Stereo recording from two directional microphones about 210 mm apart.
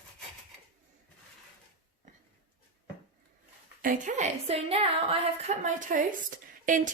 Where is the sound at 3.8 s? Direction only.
40° right (ahead or behind).